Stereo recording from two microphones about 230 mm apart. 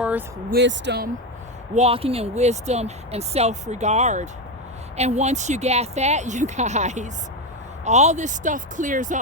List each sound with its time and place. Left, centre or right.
0.0 s vehicle: centre
0.5 s speech: right
1.7 s speech: right